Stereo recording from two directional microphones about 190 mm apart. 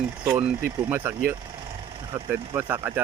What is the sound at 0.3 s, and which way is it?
Speech, 10° right (ahead or behind).